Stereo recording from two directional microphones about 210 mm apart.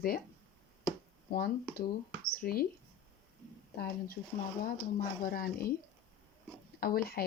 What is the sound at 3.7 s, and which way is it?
Speech, 50° left (ahead or behind).